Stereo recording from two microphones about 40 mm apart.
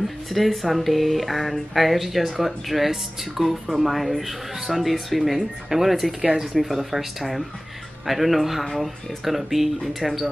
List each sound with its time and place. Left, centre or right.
0.3 s speech: centre